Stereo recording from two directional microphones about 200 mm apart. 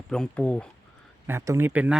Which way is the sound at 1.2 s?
15° right (ahead or behind).